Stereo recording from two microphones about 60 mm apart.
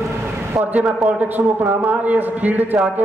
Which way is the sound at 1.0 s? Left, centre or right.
Right.